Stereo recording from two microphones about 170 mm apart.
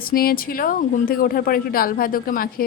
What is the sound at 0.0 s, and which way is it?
A woman's voice, 60° left (ahead or behind).